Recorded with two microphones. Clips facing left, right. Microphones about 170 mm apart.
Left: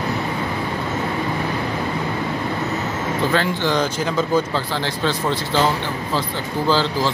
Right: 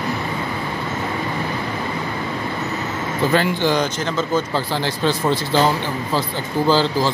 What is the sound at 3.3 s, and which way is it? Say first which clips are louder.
Speech: right 4 dB; 10° right (ahead or behind).